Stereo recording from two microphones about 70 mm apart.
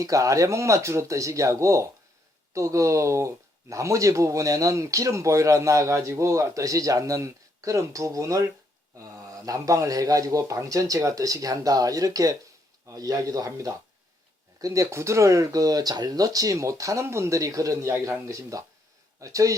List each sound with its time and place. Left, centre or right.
0.0 s a man's voice: right